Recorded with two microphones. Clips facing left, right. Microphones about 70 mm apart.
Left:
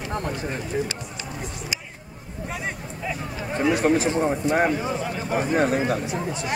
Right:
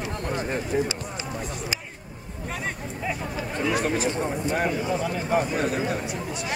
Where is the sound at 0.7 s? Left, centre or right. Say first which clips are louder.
Right 2 dB; centre.